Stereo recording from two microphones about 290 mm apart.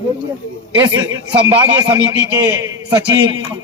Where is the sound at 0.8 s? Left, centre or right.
Centre.